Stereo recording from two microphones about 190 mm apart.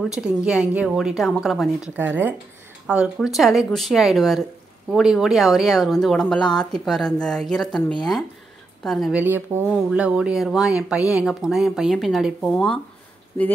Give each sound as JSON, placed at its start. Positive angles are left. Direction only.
{"t": 0.1, "sound": "speech", "side_deg": -5}
{"t": 9.2, "sound": "speech", "side_deg": -10}